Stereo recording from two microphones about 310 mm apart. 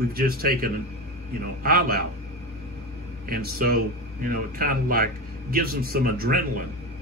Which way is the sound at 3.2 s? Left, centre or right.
Right.